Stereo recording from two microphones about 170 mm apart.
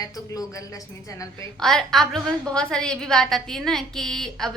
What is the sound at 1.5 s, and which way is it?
A woman's voice, 5° left (ahead or behind).